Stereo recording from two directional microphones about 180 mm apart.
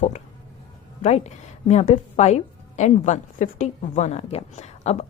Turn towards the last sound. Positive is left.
turn(degrees=35)  # may be behind; listen again after turning